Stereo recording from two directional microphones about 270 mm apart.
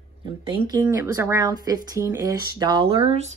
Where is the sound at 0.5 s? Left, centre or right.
Centre.